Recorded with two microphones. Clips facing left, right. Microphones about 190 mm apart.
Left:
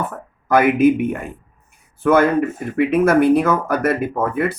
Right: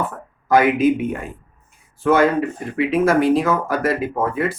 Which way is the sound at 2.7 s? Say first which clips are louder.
Left 2 dB; 55° left (ahead or behind).